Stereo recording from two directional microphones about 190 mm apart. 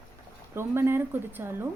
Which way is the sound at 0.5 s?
15° right (ahead or behind).